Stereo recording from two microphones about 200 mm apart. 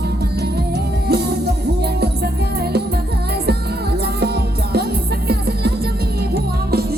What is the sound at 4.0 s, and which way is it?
Music, 55° right (ahead or behind).